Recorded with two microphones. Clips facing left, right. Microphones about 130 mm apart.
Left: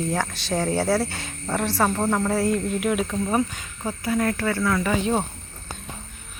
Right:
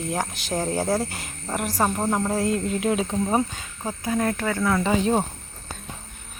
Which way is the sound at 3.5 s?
15° right (ahead or behind).